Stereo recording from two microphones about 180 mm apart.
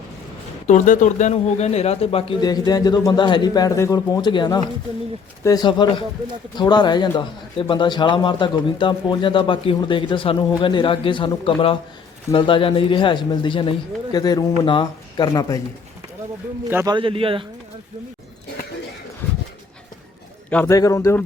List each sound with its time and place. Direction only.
0.7 s a man's voice: 45° left (ahead or behind); by 15.6 s 20° left (ahead or behind)
16.6 s a man's voice: 10° right (ahead or behind)
16.9 s a man's voice: 30° right (ahead or behind)
20.5 s speech: 10° left (ahead or behind)